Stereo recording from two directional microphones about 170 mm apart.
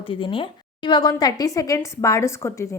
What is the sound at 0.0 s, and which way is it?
A woman's voice, 30° left (ahead or behind).